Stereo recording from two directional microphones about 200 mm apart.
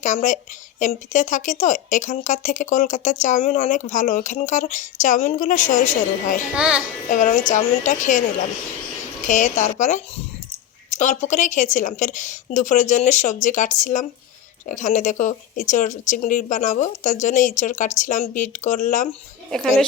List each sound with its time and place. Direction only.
0.0 s a woman's voice: 40° left (ahead or behind)
6.5 s a child's voice: 5° right (ahead or behind)
7.1 s a woman's voice: 40° left (ahead or behind)
9.2 s a woman's voice: 40° left (ahead or behind)